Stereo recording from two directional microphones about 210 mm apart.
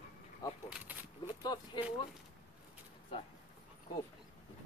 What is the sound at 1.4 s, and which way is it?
Speech, 20° left (ahead or behind).